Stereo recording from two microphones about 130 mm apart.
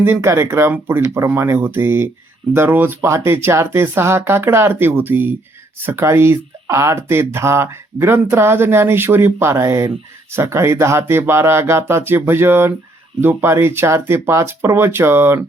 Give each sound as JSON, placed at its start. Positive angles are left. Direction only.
{"t": 0.0, "sound": "speech", "side_deg": -20}